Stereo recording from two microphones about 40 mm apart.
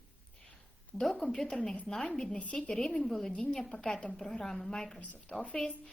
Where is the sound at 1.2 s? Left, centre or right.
Centre.